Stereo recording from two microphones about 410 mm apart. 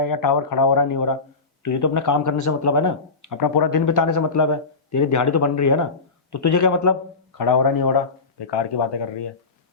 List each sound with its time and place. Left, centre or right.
0.0 s a man's voice: left